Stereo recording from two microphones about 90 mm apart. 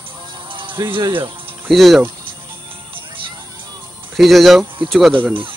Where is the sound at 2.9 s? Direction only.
75° right (ahead or behind).